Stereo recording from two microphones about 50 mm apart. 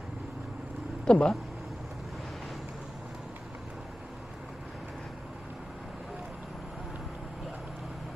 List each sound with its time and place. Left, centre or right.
1.0 s speech: centre